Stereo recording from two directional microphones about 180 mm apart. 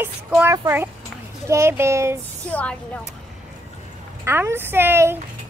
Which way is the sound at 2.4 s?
5° left (ahead or behind).